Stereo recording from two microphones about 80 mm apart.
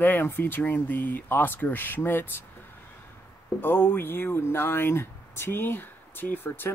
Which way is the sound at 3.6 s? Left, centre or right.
Left.